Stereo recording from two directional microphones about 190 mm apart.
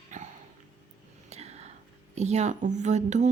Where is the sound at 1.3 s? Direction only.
35° right (ahead or behind).